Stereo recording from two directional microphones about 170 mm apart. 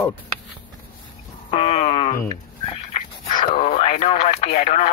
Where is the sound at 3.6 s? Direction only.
40° left (ahead or behind).